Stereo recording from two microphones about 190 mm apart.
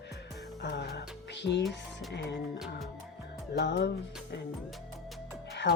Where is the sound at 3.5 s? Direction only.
65° left (ahead or behind).